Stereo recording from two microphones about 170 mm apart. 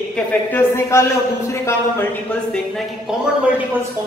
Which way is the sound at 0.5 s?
15° left (ahead or behind).